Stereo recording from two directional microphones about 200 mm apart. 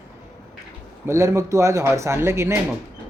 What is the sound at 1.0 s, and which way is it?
A man's voice, 15° right (ahead or behind).